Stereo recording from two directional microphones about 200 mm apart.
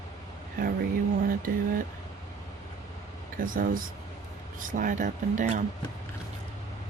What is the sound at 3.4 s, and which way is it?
Speech, 45° right (ahead or behind).